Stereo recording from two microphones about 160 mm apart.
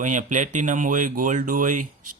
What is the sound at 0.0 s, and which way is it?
Speech, 50° right (ahead or behind).